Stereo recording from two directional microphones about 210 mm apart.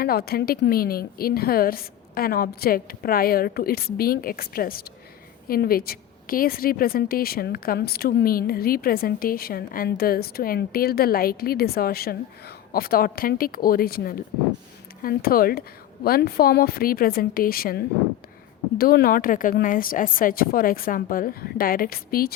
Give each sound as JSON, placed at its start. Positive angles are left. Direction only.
{"t": 0.0, "sound": "speech", "side_deg": 45}